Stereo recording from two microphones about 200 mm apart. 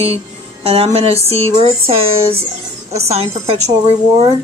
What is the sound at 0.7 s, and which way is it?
Speech, 30° right (ahead or behind).